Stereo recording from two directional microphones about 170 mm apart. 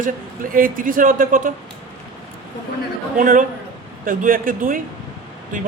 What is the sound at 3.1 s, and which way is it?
A man's voice, 50° right (ahead or behind).